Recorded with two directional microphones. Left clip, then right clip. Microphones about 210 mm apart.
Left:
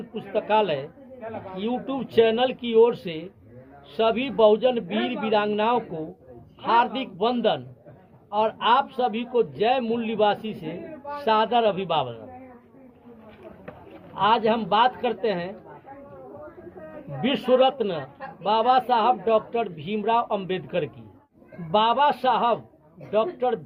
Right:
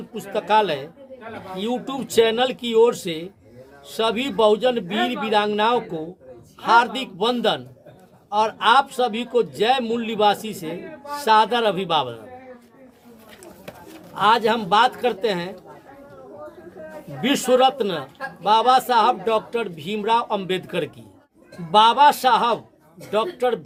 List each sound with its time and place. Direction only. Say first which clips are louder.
0.1 s a man's voice: right 3 dB; 15° right (ahead or behind)
14.2 s a man's voice: right 3 dB; 15° right (ahead or behind)
17.2 s a man's voice: right 3 dB; 15° right (ahead or behind)